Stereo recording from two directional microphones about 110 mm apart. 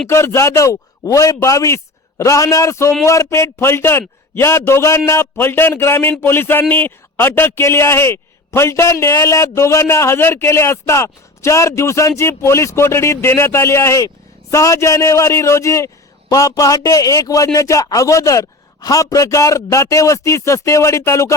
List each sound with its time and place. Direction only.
0.1 s a man's voice: 25° left (ahead or behind)